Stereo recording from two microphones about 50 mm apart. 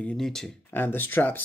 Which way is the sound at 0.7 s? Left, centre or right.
Left.